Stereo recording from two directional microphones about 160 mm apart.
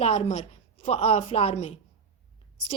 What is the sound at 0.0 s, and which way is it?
Speech, 40° left (ahead or behind).